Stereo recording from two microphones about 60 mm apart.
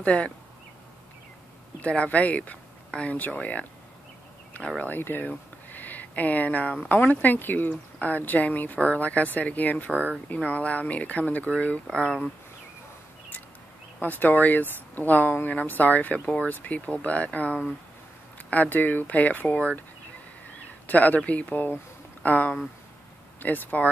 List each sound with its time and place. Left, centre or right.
0.0 s speech: centre
1.8 s speech: left
4.8 s speech: left
11.9 s speech: centre
14.0 s speech: left
19.4 s speech: centre
20.8 s speech: left